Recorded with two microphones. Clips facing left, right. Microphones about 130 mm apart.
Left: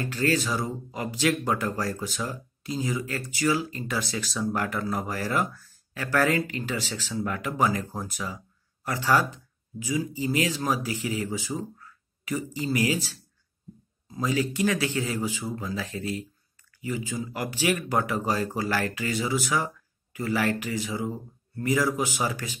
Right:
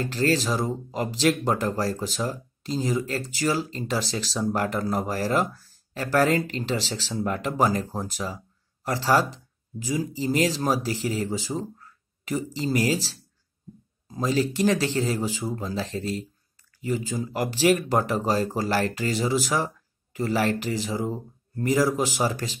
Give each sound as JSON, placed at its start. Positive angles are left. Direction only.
{"t": 0.1, "sound": "speech", "side_deg": -40}
{"t": 14.0, "sound": "speech", "side_deg": -40}